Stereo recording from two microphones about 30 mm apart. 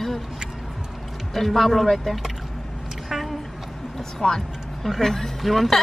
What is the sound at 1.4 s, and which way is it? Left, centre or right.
Speech, centre.